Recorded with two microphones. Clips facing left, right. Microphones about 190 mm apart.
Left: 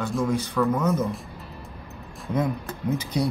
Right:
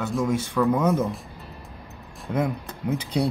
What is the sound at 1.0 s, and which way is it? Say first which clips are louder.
Music: even; centre (ahead or behind).